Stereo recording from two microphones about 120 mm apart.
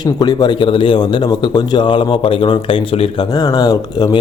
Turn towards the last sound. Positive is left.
turn(degrees=30)  # may be behind; listen again after turning